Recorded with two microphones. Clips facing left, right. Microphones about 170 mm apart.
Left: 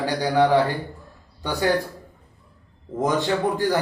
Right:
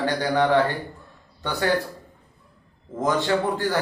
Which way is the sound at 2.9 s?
20° left (ahead or behind).